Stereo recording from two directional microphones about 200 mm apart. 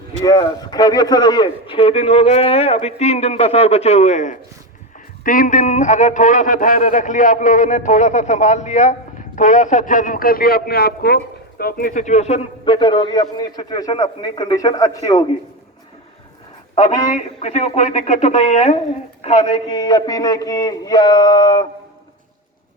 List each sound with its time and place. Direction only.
0.3 s a man's voice: 20° left (ahead or behind)
17.1 s a man's voice: 35° left (ahead or behind)